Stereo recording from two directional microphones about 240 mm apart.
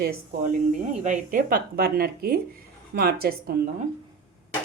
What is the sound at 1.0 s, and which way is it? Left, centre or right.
Speech, right.